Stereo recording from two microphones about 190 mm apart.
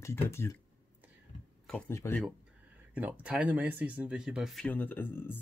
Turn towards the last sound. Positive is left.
turn(degrees=10)  # may be behind; listen again after turning